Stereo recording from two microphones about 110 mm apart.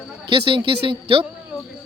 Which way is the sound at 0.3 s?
50° right (ahead or behind).